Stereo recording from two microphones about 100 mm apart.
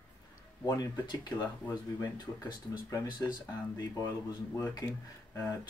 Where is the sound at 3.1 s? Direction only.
45° left (ahead or behind).